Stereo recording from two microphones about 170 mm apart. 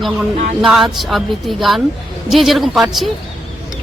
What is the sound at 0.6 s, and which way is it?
Speech, centre (ahead or behind).